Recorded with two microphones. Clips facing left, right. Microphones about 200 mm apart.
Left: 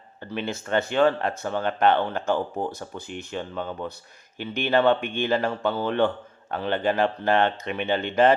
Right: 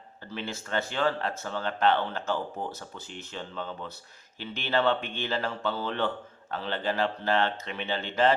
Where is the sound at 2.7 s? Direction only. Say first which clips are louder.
Left 7 dB; 15° left (ahead or behind).